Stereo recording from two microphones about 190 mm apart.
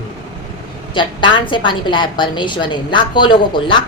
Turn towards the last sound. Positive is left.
turn(degrees=25)  # may be behind; listen again after turning